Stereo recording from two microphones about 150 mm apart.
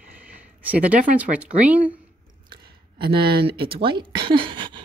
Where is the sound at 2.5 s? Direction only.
30° right (ahead or behind).